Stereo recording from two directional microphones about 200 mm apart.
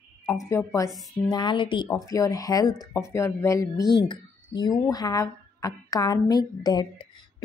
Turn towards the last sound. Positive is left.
turn(degrees=25)  # may be behind; listen again after turning